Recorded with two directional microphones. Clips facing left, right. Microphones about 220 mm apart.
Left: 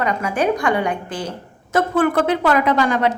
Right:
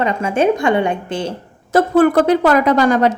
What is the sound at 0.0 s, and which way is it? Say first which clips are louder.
A woman's voice: right 4 dB; 25° right (ahead or behind).